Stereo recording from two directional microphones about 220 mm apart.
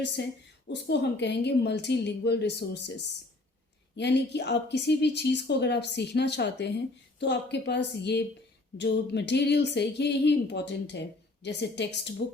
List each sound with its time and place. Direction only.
0.2 s a woman's voice: 50° left (ahead or behind)